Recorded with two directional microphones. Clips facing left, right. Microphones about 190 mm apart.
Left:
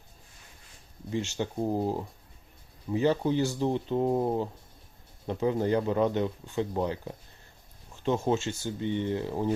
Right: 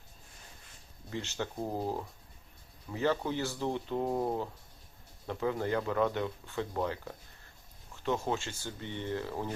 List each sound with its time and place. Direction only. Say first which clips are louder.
1.1 s speech: left 6 dB; 20° left (ahead or behind)